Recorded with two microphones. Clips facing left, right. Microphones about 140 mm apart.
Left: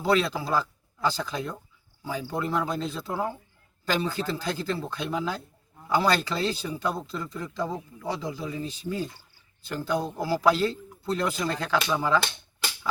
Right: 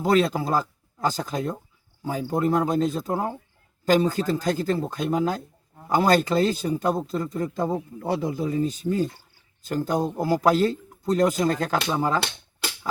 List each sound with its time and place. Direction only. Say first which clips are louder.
0.0 s a man's voice: right 4 dB; 45° right (ahead or behind)